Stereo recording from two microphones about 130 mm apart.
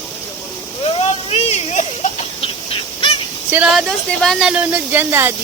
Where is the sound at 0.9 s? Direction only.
50° left (ahead or behind).